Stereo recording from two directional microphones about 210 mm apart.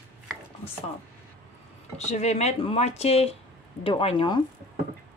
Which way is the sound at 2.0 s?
30° left (ahead or behind).